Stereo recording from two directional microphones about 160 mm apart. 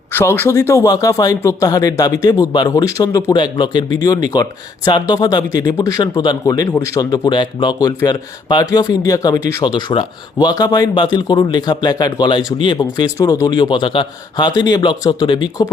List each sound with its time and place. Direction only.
0.1 s speech: 15° left (ahead or behind)
9.6 s speech: 30° left (ahead or behind)
13.1 s speech: 20° left (ahead or behind)